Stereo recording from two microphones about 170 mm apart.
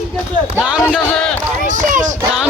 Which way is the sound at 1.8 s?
50° right (ahead or behind).